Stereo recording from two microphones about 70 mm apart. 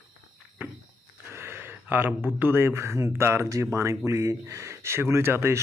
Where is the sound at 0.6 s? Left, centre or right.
Right.